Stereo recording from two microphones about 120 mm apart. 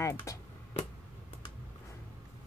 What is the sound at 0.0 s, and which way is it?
Speech, 25° left (ahead or behind).